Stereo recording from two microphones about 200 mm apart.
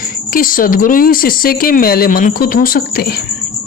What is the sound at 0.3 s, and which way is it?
Speech, 45° left (ahead or behind).